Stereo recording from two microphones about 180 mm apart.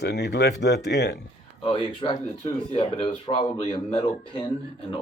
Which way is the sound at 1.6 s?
30° left (ahead or behind).